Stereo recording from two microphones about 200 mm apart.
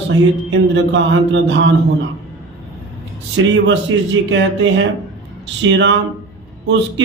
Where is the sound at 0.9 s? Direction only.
65° right (ahead or behind).